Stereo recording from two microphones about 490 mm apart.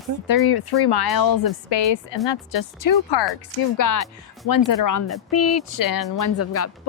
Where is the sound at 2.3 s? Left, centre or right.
Left.